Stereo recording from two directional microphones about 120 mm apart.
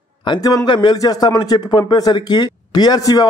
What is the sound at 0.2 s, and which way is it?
A man's voice, 40° left (ahead or behind).